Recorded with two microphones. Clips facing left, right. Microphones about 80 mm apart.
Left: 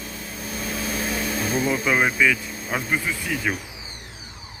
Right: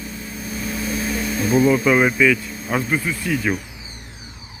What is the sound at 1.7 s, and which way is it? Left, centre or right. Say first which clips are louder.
Speech: right 5 dB; centre.